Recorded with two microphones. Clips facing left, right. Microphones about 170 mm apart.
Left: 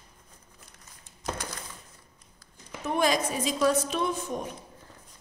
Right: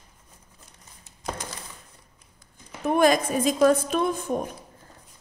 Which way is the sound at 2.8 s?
55° right (ahead or behind).